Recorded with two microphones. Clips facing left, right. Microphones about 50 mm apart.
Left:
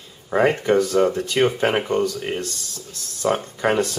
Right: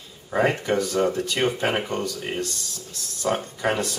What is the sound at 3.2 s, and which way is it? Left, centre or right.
Speech, left.